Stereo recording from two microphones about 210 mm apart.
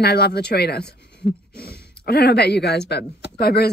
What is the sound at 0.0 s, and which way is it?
Speech, 50° left (ahead or behind).